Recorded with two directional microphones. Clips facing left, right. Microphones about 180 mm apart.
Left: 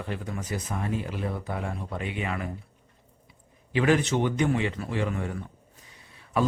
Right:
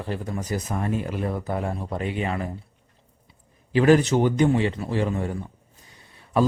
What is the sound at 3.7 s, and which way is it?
Speech, 40° right (ahead or behind).